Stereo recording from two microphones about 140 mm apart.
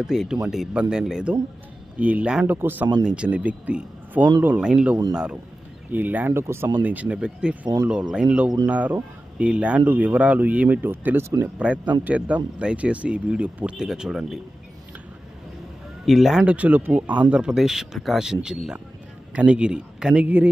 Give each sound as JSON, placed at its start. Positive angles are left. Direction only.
{"t": 0.0, "sound": "speech", "side_deg": -5}
{"t": 7.6, "sound": "speech", "side_deg": -30}
{"t": 7.9, "sound": "speech", "side_deg": -5}
{"t": 16.1, "sound": "speech", "side_deg": 0}